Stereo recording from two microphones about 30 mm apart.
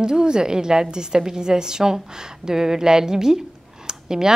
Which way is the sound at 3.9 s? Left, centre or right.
Right.